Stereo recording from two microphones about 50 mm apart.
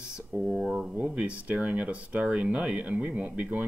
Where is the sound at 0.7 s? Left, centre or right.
Centre.